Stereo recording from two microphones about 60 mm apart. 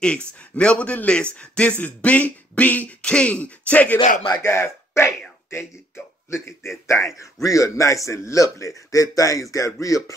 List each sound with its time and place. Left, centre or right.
0.0 s speech: centre
4.5 s a man's voice: left
7.4 s a man's voice: left